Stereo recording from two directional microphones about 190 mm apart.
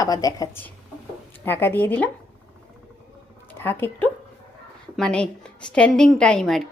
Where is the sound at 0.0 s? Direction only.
20° left (ahead or behind).